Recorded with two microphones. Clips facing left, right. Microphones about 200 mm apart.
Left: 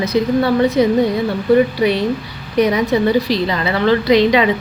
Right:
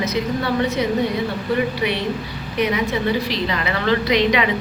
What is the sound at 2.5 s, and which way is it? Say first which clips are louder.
A woman's voice: left 6 dB; 40° left (ahead or behind).